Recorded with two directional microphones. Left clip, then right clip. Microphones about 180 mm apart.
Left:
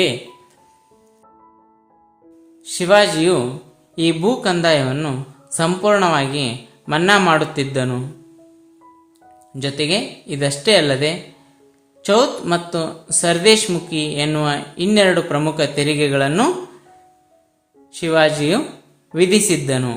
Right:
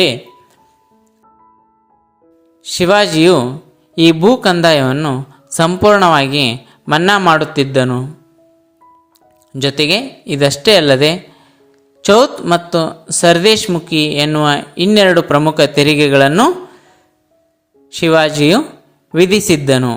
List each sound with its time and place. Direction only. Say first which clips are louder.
2.6 s speech: right 2 dB; 35° right (ahead or behind)
9.5 s speech: right 7 dB; 40° right (ahead or behind)
17.9 s speech: right 4 dB; 35° right (ahead or behind)